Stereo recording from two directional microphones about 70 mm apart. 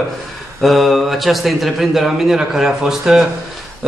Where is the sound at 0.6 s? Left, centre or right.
Centre.